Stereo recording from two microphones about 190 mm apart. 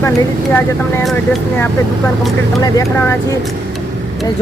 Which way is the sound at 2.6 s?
20° left (ahead or behind).